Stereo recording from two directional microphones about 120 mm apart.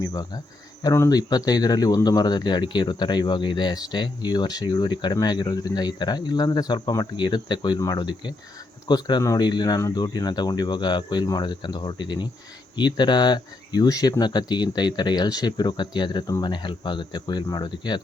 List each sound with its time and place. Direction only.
0.0 s speech: 35° left (ahead or behind)